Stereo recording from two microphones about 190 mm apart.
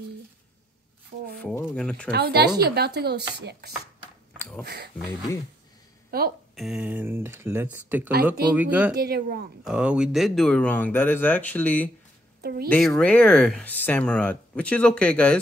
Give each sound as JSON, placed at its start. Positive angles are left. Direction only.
{"t": 1.4, "sound": "speech", "side_deg": 10}
{"t": 2.0, "sound": "speech", "side_deg": -55}
{"t": 4.4, "sound": "a sound", "side_deg": 0}
{"t": 4.6, "sound": "speech", "side_deg": -60}
{"t": 6.1, "sound": "speech", "side_deg": -55}
{"t": 6.5, "sound": "speech", "side_deg": 0}
{"t": 8.9, "sound": "speech", "side_deg": -55}
{"t": 9.7, "sound": "speech", "side_deg": -5}
{"t": 12.4, "sound": "speech", "side_deg": -55}
{"t": 12.6, "sound": "speech", "side_deg": 5}